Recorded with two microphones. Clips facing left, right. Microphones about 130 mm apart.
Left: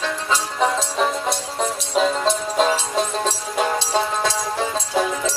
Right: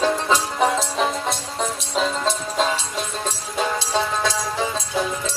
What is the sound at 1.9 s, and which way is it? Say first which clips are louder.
Music: left 4 dB; 5° left (ahead or behind).